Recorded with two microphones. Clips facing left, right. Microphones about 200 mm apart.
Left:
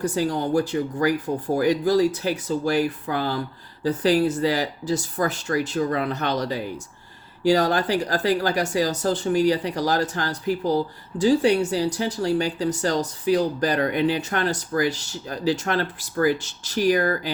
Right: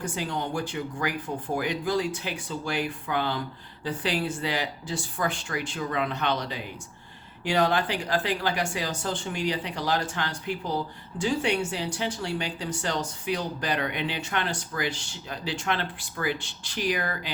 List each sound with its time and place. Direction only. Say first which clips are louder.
0.0 s speech: left 8 dB; 40° left (ahead or behind)